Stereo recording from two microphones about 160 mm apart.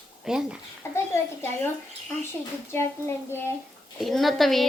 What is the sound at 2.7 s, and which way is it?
Speech, 15° left (ahead or behind).